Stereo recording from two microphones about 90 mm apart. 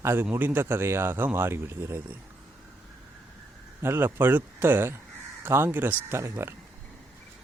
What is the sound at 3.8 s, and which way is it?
Speech, 30° right (ahead or behind).